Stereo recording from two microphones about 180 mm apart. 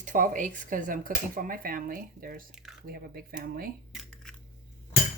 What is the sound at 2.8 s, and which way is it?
Speech, 55° right (ahead or behind).